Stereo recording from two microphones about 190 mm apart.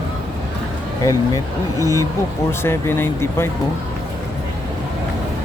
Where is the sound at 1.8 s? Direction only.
15° right (ahead or behind).